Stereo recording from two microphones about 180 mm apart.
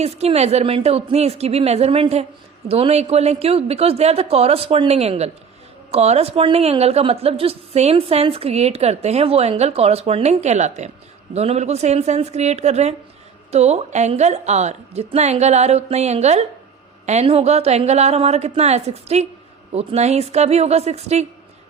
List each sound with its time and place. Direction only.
0.0 s speech: 35° right (ahead or behind)